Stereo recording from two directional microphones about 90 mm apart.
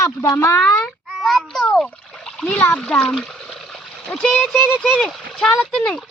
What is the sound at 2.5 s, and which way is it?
Speech, 20° left (ahead or behind).